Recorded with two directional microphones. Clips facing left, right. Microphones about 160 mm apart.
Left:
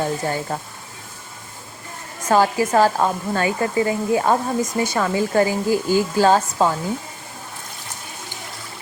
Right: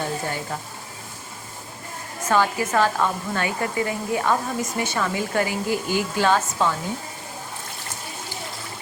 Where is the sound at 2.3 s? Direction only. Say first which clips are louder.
Left 4 dB; 40° left (ahead or behind).